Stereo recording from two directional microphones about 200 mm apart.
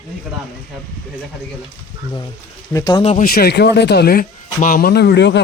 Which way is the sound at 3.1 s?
40° left (ahead or behind).